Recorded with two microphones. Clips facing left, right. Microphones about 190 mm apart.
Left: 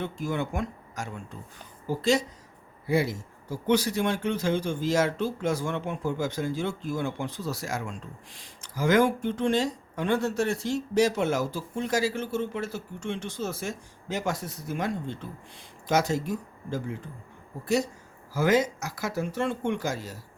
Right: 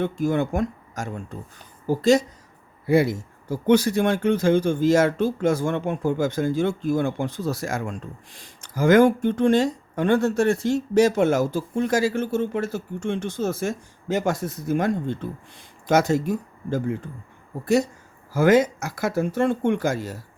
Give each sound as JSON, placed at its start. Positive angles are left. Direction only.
{"t": 0.0, "sound": "speech", "side_deg": -50}
{"t": 2.8, "sound": "speech", "side_deg": -55}
{"t": 18.3, "sound": "speech", "side_deg": -50}